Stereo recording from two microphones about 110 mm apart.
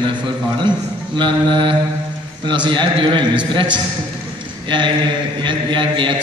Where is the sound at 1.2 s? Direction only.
45° right (ahead or behind).